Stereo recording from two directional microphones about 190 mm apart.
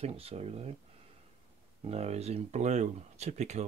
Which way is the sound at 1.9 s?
35° right (ahead or behind).